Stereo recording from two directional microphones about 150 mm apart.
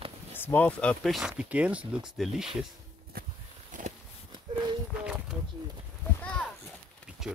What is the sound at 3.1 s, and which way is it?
Walk, 85° right.